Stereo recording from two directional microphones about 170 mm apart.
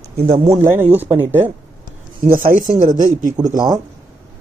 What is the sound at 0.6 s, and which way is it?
Speech, 15° right (ahead or behind).